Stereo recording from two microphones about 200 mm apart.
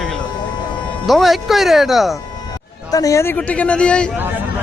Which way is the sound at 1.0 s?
Centre (ahead or behind).